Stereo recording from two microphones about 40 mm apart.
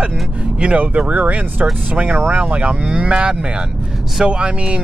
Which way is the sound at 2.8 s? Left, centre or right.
Right.